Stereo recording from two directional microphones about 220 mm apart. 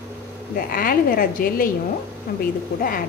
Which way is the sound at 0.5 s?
40° left (ahead or behind).